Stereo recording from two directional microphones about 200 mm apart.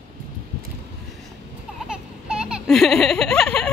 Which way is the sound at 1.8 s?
5° right (ahead or behind).